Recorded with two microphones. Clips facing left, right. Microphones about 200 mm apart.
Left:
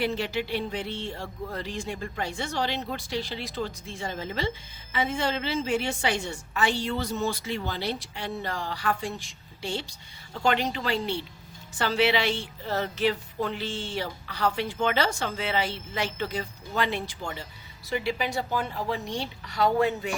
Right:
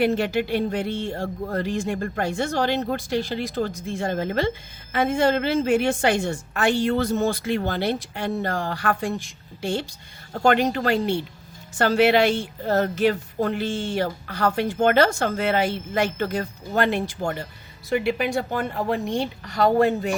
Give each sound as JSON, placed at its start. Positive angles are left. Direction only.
{"t": 0.0, "sound": "a woman's voice", "side_deg": -50}